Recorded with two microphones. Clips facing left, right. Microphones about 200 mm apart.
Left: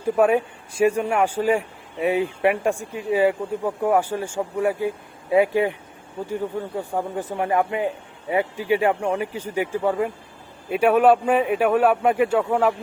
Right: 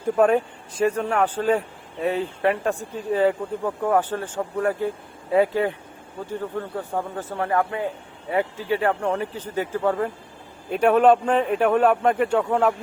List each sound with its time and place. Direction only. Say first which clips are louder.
0.0 s speech: even; 10° left (ahead or behind)